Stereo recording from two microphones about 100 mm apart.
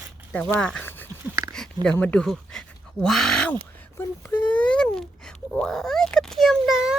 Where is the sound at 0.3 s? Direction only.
10° left (ahead or behind).